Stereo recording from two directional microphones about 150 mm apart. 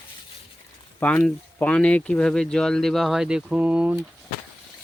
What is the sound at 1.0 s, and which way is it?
Speech, 10° left (ahead or behind).